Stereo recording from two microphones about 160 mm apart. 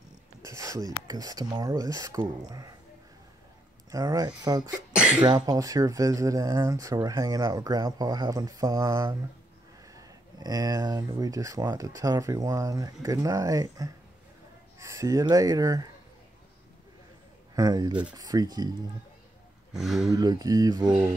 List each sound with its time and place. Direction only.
0.4 s speech: 20° right (ahead or behind)
3.9 s speech: 20° right (ahead or behind)
4.9 s a sound: 5° right (ahead or behind)
5.2 s speech: 25° right (ahead or behind)
17.6 s speech: 25° right (ahead or behind)
19.7 s speech: centre (ahead or behind)
20.1 s speech: 25° right (ahead or behind)